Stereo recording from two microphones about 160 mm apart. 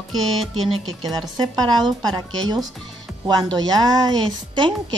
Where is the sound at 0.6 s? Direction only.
35° right (ahead or behind).